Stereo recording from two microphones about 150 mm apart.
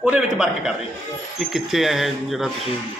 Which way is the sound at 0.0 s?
5° right (ahead or behind).